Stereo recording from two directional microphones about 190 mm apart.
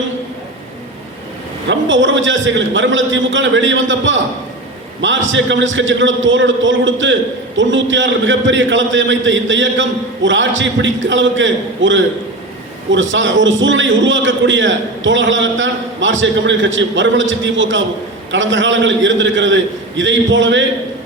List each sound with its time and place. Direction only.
1.6 s a man's voice: 70° right (ahead or behind)